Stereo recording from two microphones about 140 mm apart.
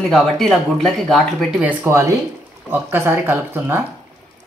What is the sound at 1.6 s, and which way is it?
Speech, 15° right (ahead or behind).